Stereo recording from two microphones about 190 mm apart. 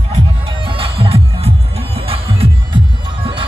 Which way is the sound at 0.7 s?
30° right (ahead or behind).